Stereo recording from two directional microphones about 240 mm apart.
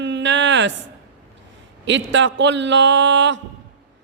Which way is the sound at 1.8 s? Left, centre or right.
Right.